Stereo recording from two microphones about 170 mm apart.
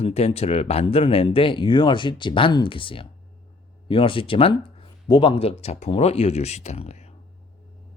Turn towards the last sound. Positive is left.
turn(degrees=40)  # may be behind; listen again after turning